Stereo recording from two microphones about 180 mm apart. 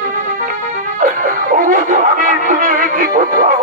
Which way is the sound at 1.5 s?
45° right (ahead or behind).